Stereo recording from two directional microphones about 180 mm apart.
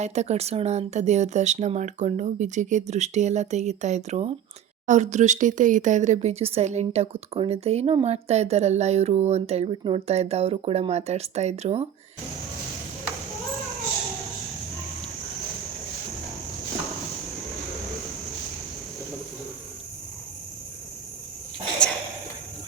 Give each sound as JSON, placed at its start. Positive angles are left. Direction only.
{"t": 0.0, "sound": "speech", "side_deg": -40}